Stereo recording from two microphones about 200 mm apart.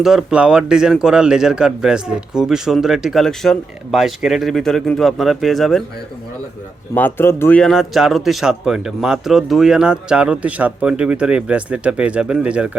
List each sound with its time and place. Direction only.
0.0 s a man's voice: centre (ahead or behind)
6.9 s a man's voice: 10° left (ahead or behind); by 12.7 s 5° right (ahead or behind)